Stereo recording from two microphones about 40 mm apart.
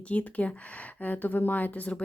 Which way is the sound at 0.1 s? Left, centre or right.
Left.